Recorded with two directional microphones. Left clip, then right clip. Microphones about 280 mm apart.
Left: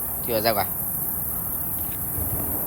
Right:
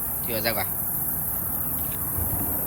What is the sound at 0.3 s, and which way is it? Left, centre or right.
Speech, centre.